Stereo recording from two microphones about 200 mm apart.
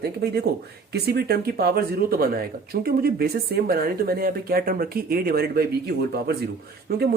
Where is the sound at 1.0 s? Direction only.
50° right (ahead or behind).